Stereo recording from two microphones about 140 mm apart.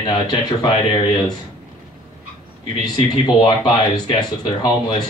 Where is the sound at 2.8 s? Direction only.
30° left (ahead or behind).